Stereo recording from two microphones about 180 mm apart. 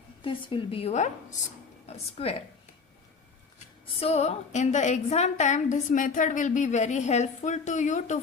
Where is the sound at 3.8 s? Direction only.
35° left (ahead or behind).